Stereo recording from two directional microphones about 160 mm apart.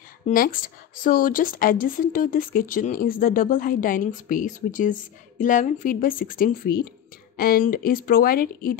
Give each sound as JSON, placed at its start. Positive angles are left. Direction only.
{"t": 0.3, "sound": "speech", "side_deg": 60}